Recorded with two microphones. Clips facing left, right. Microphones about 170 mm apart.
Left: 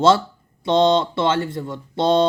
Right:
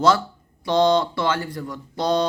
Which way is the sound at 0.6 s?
25° left (ahead or behind).